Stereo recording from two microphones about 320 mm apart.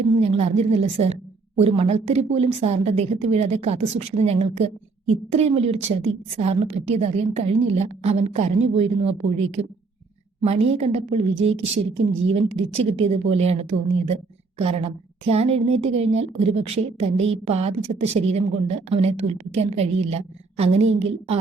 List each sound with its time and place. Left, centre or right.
0.2 s a woman's voice: centre